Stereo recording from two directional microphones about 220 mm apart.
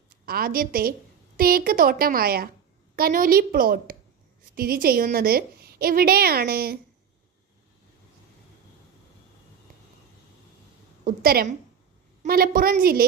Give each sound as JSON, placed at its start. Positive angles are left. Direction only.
{"t": 0.3, "sound": "a woman's voice", "side_deg": -40}
{"t": 11.0, "sound": "a woman's voice", "side_deg": -40}